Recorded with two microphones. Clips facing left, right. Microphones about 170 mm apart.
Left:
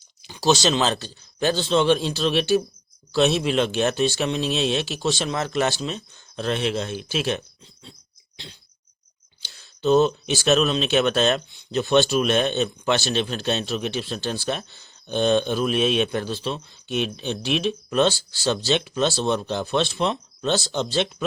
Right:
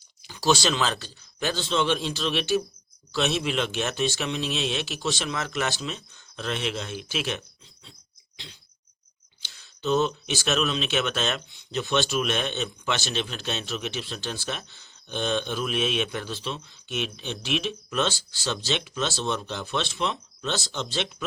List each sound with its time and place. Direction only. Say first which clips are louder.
0.2 s speech: left 3 dB; 20° left (ahead or behind)
9.4 s speech: left 7 dB; 35° left (ahead or behind)